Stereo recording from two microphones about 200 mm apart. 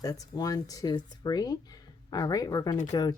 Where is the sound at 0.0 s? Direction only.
20° left (ahead or behind).